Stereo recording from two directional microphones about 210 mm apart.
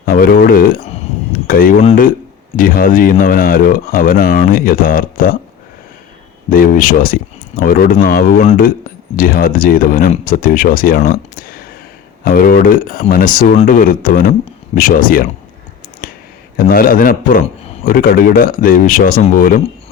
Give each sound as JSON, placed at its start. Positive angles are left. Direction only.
{"t": 0.0, "sound": "a sound", "side_deg": 40}
{"t": 1.5, "sound": "speech", "side_deg": 40}
{"t": 6.5, "sound": "speech", "side_deg": 40}
{"t": 16.6, "sound": "speech", "side_deg": 45}